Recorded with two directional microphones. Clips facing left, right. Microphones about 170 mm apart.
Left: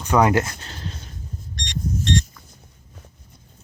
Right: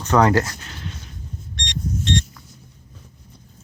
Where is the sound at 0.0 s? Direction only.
15° left (ahead or behind).